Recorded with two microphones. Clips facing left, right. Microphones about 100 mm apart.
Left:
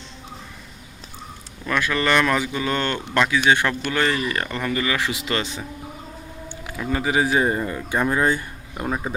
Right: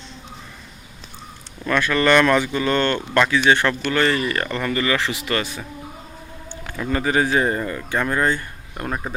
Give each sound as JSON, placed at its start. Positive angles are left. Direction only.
{"t": 1.6, "sound": "speech", "side_deg": 10}
{"t": 6.7, "sound": "speech", "side_deg": 5}